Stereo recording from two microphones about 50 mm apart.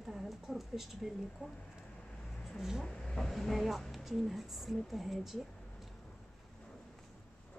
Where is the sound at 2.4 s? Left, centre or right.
Centre.